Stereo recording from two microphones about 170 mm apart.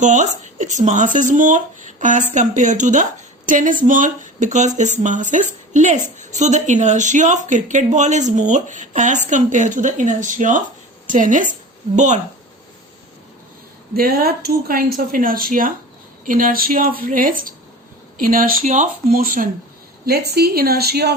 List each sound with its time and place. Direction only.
0.0 s a woman's voice: 45° right (ahead or behind)
13.9 s speech: 60° right (ahead or behind)
20.1 s a woman's voice: 70° right (ahead or behind)